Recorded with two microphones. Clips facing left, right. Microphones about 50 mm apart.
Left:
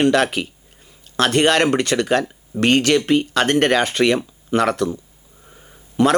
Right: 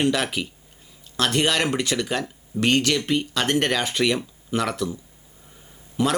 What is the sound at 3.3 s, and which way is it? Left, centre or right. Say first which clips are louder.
Speech: left 6 dB; left.